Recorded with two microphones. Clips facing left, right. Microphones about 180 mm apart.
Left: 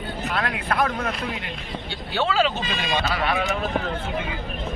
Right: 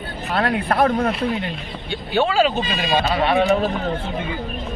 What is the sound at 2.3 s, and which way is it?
Speech, 40° right (ahead or behind).